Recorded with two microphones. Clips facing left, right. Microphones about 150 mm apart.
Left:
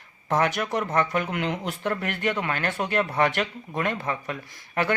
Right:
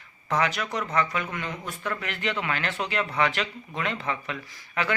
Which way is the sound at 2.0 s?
50° left (ahead or behind).